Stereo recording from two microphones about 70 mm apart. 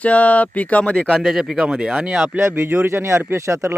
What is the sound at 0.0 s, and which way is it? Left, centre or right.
Speech, left.